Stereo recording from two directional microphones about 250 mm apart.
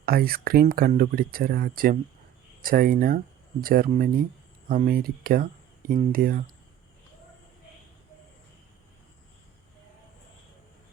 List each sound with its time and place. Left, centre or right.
0.0 s speech: right